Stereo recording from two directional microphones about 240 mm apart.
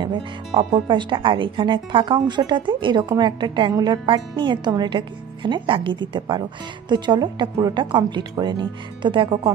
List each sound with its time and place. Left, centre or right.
0.0 s speech: centre